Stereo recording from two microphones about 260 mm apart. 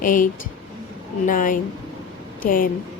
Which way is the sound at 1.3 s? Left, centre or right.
Left.